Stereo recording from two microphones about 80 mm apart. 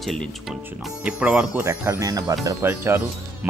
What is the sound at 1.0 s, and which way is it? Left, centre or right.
Speech, centre.